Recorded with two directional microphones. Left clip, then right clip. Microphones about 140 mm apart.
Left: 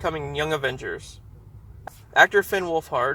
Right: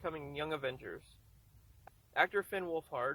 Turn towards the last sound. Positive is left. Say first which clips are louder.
# left 14 dB
turn(degrees=-25)  # may be behind; listen again after turning